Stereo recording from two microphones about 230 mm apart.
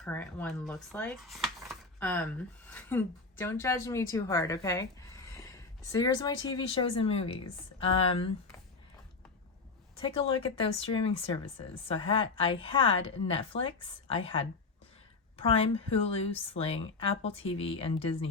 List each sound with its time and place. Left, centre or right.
0.0 s a woman's voice: centre; by 8.3 s left
10.0 s a woman's voice: left